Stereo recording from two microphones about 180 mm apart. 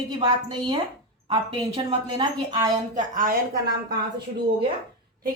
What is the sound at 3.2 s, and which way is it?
Speech, 50° right (ahead or behind).